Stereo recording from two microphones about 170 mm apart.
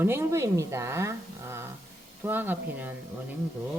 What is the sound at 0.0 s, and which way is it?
A woman's voice, 15° right (ahead or behind).